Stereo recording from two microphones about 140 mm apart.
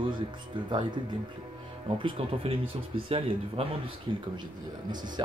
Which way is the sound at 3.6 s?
45° right (ahead or behind).